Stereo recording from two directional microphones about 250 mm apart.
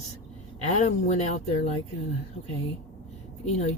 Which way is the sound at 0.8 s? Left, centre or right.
Left.